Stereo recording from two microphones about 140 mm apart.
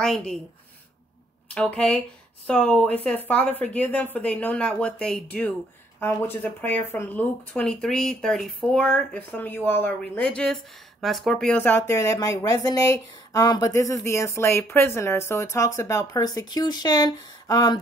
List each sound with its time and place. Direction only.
0.0 s a woman's voice: centre (ahead or behind)
1.5 s speech: 10° left (ahead or behind)
11.5 s speech: 15° left (ahead or behind)